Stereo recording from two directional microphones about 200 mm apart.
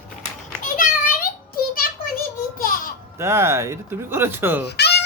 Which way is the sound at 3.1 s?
15° right (ahead or behind).